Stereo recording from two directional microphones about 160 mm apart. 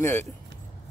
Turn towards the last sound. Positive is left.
turn(degrees=15)  # may be behind; listen again after turning